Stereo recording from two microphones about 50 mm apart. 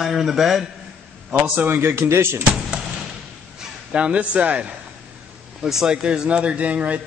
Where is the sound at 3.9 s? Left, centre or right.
Right.